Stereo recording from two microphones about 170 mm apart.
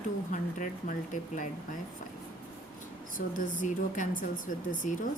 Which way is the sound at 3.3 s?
50° left (ahead or behind).